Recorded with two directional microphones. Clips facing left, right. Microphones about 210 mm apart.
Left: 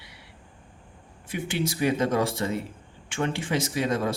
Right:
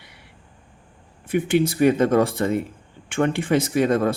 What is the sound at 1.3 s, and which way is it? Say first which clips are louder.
Speech: right 9 dB; 55° right (ahead or behind).